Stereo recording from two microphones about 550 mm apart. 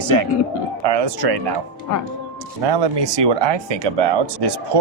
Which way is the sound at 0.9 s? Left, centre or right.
Right.